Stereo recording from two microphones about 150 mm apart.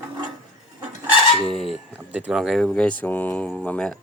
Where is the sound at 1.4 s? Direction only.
Centre (ahead or behind).